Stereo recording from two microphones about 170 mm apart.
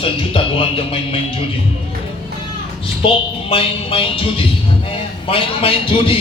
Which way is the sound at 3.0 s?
30° left (ahead or behind).